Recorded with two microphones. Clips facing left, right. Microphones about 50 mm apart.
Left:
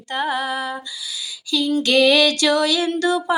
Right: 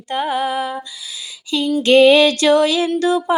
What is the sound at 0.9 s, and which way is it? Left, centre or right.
Speech, right.